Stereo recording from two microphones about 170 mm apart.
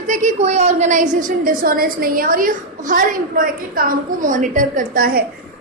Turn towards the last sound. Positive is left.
turn(degrees=-60)  # may be behind; listen again after turning